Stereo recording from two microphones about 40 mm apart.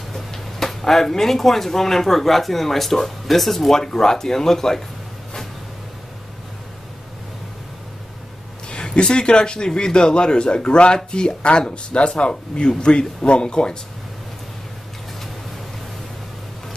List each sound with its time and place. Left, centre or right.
0.1 s speech: centre
8.6 s a man's voice: left